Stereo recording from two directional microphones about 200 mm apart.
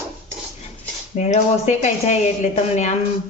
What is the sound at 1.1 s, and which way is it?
A woman's voice, 35° left (ahead or behind).